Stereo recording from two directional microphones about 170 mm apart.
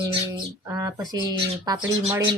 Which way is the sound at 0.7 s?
20° right (ahead or behind).